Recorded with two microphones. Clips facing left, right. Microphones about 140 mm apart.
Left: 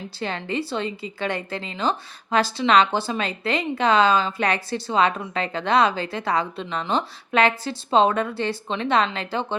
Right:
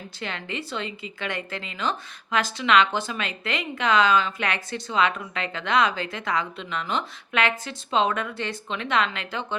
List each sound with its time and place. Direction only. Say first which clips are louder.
0.2 s speech: left 6 dB; 35° left (ahead or behind)